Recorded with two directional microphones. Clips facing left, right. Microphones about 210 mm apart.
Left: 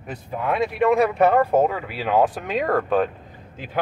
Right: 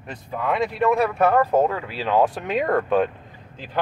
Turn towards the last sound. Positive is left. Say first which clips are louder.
# even
turn(degrees=0)  # may be behind; listen again after turning